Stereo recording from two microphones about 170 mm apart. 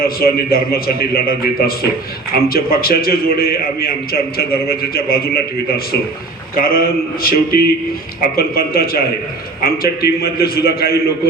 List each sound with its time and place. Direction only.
0.0 s a man's voice: 60° left (ahead or behind)